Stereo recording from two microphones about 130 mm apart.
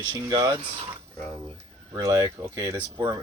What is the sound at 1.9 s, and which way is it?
Speech, 30° right (ahead or behind).